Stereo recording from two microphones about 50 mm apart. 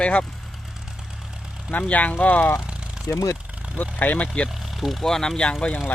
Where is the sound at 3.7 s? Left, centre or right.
Left.